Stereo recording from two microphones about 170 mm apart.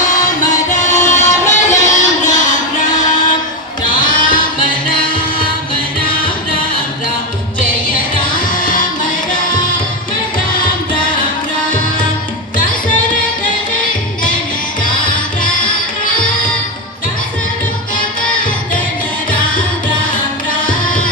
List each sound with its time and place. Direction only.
0.7 s music: 45° left (ahead or behind)
3.8 s music: 50° left (ahead or behind)
8.1 s music: 50° left (ahead or behind)